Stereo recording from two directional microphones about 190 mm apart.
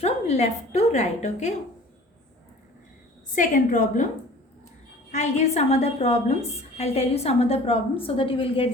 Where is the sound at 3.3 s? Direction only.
45° left (ahead or behind).